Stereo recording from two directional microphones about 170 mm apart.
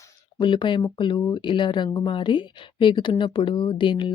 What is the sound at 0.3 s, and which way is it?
Speech, 30° left (ahead or behind).